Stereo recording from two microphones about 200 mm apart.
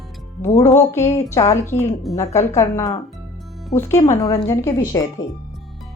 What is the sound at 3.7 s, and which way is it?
Speech, 35° left (ahead or behind).